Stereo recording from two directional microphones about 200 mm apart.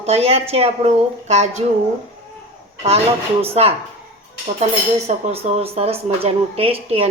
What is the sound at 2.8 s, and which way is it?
Speech, 30° right (ahead or behind).